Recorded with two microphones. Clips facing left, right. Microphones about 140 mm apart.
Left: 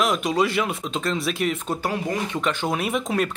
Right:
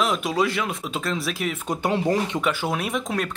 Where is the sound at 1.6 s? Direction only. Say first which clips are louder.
Right 1 dB; 15° right (ahead or behind).